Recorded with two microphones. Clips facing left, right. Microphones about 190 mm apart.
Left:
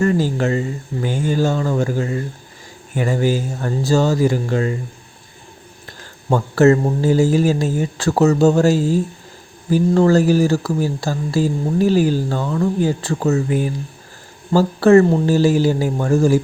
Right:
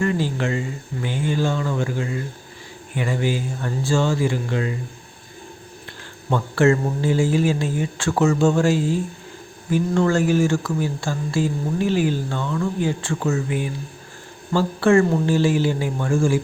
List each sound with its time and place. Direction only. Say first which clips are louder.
0.0 s speech: left 5 dB; 40° left (ahead or behind)
6.3 s speech: left 5 dB; 40° left (ahead or behind)